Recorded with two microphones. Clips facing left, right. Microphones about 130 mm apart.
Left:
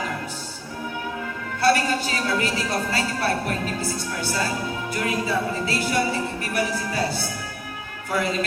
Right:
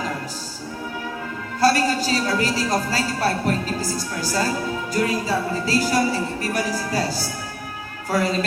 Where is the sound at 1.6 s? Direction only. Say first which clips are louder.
Right 2 dB; 35° right (ahead or behind).